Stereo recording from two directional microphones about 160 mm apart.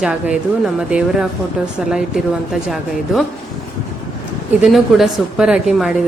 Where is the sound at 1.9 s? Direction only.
5° right (ahead or behind).